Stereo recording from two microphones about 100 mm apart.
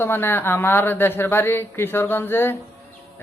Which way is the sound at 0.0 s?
20° left (ahead or behind).